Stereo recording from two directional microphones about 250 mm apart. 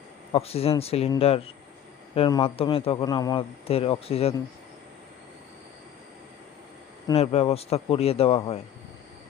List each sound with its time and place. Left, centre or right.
0.3 s a man's voice: left
7.1 s a man's voice: left